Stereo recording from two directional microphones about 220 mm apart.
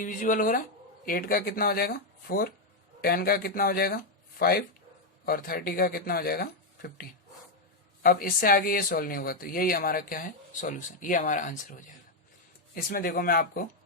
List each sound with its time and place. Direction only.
0.0 s speech: 35° left (ahead or behind)
12.7 s speech: 40° left (ahead or behind)